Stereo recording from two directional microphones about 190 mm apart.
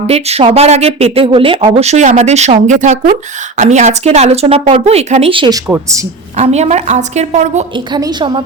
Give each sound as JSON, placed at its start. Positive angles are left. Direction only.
{"t": 0.1, "sound": "speech", "side_deg": -30}
{"t": 6.3, "sound": "speech", "side_deg": -35}
{"t": 7.9, "sound": "a woman's voice", "side_deg": -25}